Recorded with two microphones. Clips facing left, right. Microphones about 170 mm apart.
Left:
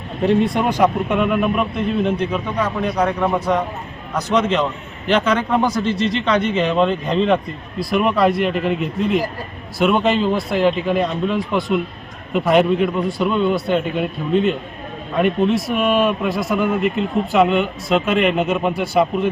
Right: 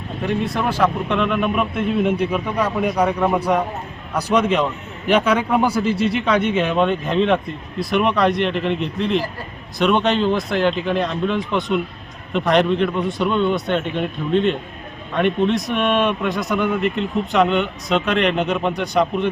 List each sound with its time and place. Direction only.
0.2 s speech: 25° left (ahead or behind)
0.6 s a man's voice: 15° left (ahead or behind)